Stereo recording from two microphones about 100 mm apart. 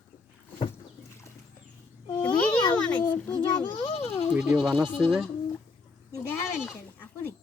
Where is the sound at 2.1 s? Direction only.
50° left (ahead or behind).